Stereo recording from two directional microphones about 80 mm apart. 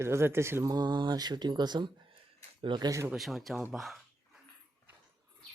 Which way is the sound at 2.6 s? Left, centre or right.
Right.